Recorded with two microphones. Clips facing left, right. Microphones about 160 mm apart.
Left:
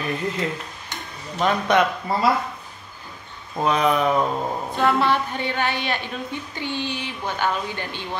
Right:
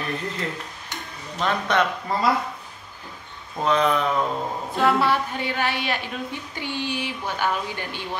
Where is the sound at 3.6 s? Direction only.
10° left (ahead or behind).